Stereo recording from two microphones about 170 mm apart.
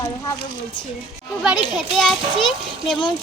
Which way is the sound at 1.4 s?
Centre (ahead or behind).